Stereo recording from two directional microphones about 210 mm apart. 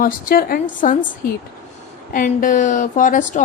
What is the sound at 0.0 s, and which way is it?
Speech, 45° left (ahead or behind).